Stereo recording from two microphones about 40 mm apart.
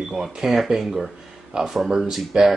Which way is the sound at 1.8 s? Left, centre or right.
Centre.